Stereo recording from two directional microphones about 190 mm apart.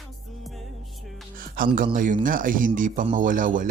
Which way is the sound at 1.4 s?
45° right (ahead or behind).